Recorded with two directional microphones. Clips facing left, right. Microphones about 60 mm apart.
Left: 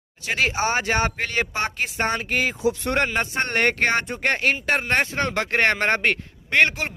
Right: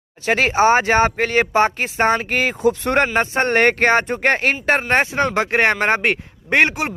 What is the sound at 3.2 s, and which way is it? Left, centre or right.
A man's voice, right.